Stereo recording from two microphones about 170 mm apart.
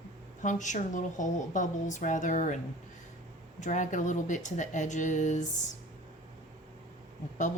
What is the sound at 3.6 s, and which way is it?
A woman's voice, 45° left (ahead or behind).